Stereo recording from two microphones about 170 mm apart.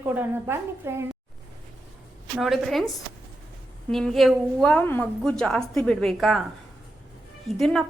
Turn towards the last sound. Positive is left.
turn(degrees=0)  # may be behind; listen again after turning